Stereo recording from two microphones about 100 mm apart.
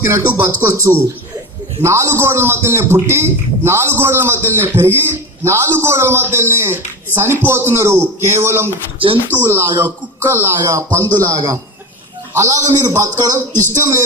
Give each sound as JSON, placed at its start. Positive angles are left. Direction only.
{"t": 0.3, "sound": "a man's voice", "side_deg": -20}
{"t": 11.0, "sound": "a man's voice", "side_deg": 15}
{"t": 12.3, "sound": "a man's voice", "side_deg": -25}